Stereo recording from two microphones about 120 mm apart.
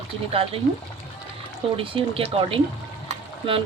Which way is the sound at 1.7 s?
50° right (ahead or behind).